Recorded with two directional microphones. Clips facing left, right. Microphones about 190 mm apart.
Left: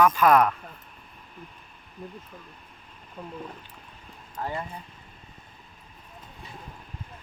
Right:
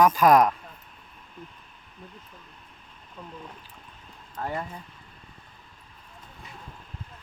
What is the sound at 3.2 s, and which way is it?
Speech, 10° left (ahead or behind).